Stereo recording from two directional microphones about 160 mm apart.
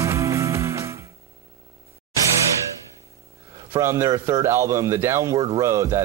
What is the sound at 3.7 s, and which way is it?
Speech, 15° right (ahead or behind).